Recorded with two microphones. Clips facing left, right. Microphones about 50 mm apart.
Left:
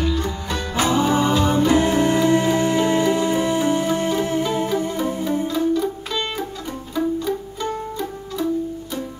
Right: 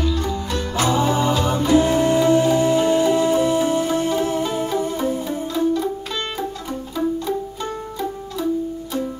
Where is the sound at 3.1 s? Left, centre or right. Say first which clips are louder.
Right 2 dB; centre.